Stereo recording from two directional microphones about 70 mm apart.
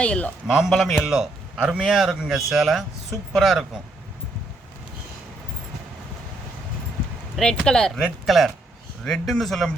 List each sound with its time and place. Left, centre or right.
0.0 s speech: centre
0.4 s a man's voice: centre
7.3 s speech: centre